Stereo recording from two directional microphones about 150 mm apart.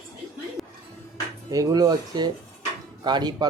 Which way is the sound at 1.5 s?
25° right (ahead or behind).